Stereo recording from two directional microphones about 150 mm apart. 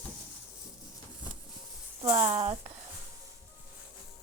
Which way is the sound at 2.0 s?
25° right (ahead or behind).